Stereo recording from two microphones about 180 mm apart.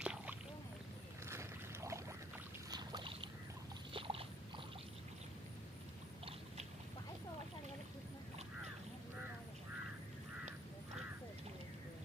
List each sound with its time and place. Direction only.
0.0 s rowboat: 5° right (ahead or behind)
1.3 s boat: 15° right (ahead or behind); by 4.6 s 30° right (ahead or behind)